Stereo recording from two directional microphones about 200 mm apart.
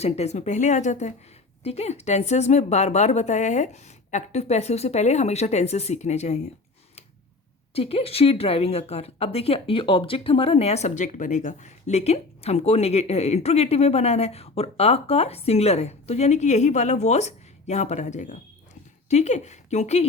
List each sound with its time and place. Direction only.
0.0 s speech: 35° left (ahead or behind)
7.7 s speech: 30° left (ahead or behind)